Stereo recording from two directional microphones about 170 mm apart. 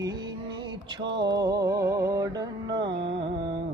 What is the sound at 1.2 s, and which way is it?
Music, 25° right (ahead or behind).